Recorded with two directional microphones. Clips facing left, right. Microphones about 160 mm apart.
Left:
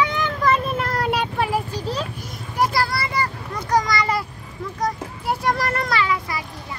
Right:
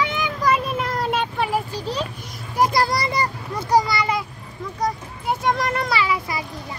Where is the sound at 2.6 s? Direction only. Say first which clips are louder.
Right 2 dB; 15° right (ahead or behind); by 4.2 s centre (ahead or behind).